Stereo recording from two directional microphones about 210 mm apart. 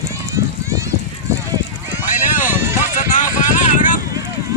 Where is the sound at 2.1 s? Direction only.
35° left (ahead or behind).